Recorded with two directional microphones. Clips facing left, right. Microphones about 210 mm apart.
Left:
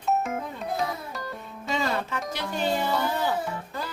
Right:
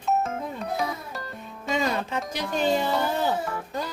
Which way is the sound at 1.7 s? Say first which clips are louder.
Right 2 dB; 15° right (ahead or behind).